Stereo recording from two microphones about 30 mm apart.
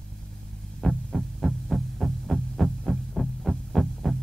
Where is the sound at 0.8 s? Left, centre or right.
Centre.